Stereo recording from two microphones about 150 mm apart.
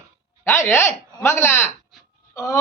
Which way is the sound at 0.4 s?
20° left (ahead or behind).